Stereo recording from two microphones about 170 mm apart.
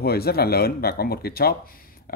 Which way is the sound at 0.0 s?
65° left (ahead or behind).